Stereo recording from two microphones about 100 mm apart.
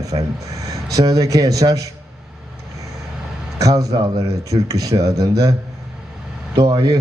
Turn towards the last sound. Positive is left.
turn(degrees=-40)  # may be behind; listen again after turning